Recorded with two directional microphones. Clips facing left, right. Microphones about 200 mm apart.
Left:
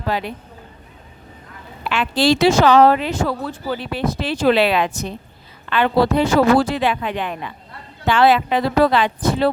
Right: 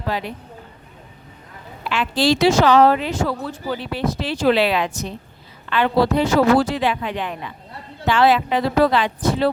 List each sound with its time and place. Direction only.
0.1 s speech: 60° left (ahead or behind)
1.8 s speech: 60° left (ahead or behind)